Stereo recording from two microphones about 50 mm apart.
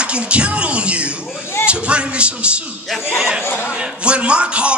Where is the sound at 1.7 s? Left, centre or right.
Right.